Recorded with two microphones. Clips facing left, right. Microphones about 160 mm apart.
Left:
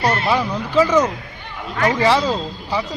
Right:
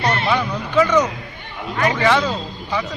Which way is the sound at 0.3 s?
30° left (ahead or behind).